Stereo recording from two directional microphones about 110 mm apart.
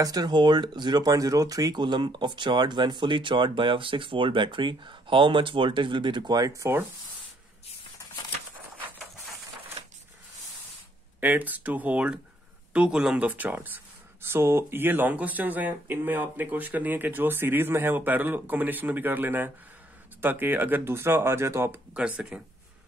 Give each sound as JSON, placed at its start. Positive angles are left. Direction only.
{"t": 0.0, "sound": "speech", "side_deg": -35}
{"t": 11.1, "sound": "speech", "side_deg": -15}
{"t": 21.9, "sound": "speech", "side_deg": -10}